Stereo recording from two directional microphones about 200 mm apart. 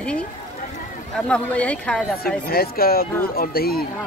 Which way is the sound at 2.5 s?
50° left (ahead or behind).